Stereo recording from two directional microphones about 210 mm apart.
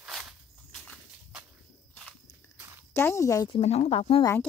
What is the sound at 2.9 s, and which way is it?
Speech, 15° left (ahead or behind).